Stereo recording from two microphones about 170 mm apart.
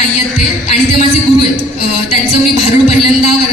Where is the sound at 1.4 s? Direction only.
35° left (ahead or behind).